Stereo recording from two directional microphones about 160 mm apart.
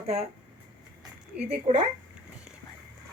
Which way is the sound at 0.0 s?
40° right (ahead or behind).